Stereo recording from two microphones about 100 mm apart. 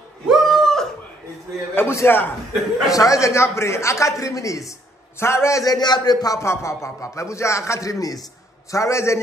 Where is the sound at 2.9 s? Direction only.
35° left (ahead or behind).